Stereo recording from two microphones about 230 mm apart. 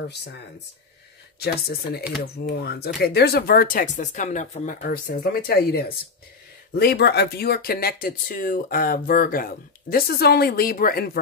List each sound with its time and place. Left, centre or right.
0.1 s speech: left
1.4 s speech: left